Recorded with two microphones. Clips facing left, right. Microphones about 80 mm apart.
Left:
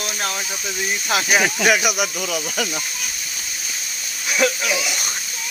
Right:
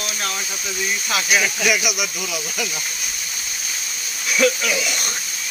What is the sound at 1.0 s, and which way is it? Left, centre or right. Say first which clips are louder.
Speech: left 2 dB; left.